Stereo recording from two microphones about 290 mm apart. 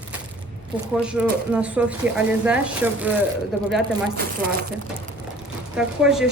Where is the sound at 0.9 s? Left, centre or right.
Centre.